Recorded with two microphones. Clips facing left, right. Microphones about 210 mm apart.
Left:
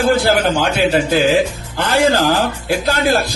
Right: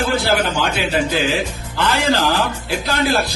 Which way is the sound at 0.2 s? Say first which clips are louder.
Left 4 dB; 45° left (ahead or behind).